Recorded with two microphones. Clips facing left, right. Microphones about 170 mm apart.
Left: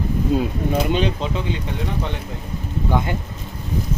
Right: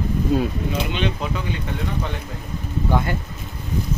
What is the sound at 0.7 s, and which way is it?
Speech, 40° left (ahead or behind).